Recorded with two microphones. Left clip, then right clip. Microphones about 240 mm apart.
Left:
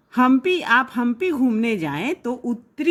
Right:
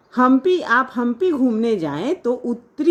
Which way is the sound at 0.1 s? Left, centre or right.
Left.